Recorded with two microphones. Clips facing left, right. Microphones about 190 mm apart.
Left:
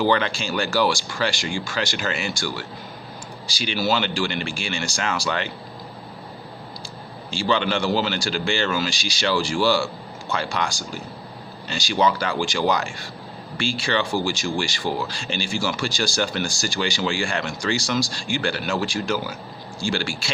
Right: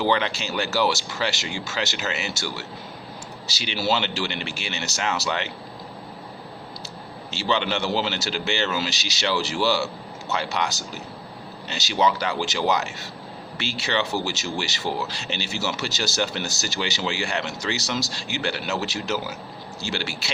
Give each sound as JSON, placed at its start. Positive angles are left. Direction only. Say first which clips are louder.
{"t": 0.0, "sound": "speech", "louder": "left 2 dB", "side_deg": -20}
{"t": 7.3, "sound": "speech", "louder": "left 2 dB", "side_deg": -20}